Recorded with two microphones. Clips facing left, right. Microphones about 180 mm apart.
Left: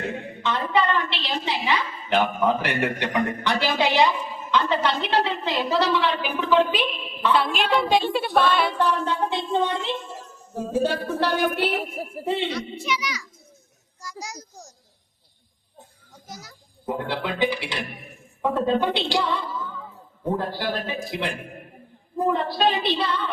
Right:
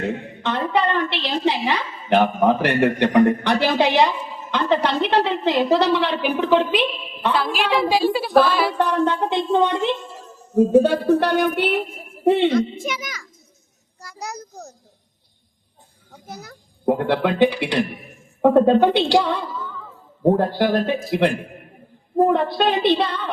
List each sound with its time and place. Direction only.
0.4 s a woman's voice: 60° right (ahead or behind)
7.3 s a woman's voice: centre (ahead or behind)
8.8 s a woman's voice: 60° right (ahead or behind)
14.0 s a sound: 60° right (ahead or behind)
16.1 s a child's voice: 60° right (ahead or behind)